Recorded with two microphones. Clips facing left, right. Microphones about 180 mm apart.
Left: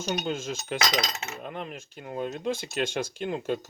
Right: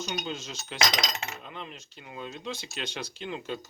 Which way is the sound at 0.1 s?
50° left (ahead or behind).